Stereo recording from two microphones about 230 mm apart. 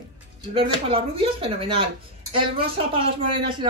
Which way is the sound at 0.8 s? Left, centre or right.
Right.